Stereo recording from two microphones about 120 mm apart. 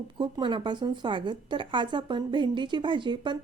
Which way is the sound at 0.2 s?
40° right (ahead or behind).